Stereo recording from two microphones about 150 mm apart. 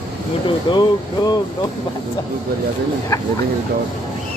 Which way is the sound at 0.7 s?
35° left (ahead or behind).